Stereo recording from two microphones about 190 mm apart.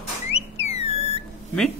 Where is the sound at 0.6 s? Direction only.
35° left (ahead or behind).